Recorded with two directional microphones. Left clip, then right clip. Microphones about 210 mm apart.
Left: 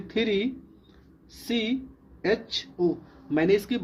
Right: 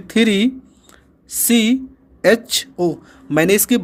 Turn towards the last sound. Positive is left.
turn(degrees=-50)  # may be behind; listen again after turning